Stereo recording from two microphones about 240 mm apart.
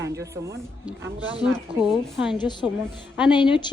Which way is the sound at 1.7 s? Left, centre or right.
Right.